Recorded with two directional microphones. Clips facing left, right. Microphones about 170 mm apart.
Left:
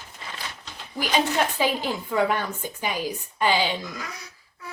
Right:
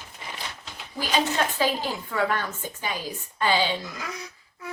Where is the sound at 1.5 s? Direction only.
15° left (ahead or behind).